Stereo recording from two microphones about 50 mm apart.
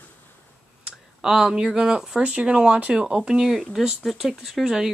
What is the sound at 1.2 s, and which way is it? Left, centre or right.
Speech, centre.